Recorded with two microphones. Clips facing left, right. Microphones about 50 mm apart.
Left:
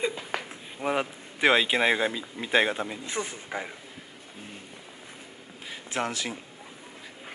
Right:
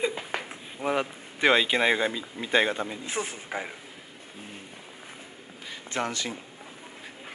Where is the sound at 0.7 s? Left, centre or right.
Centre.